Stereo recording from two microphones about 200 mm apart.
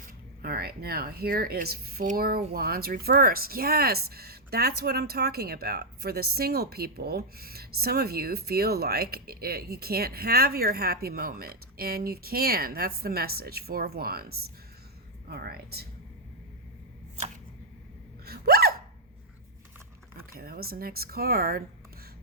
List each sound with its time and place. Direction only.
0.4 s speech: 50° right (ahead or behind)
18.3 s gasp: 50° right (ahead or behind)
20.3 s speech: 50° right (ahead or behind)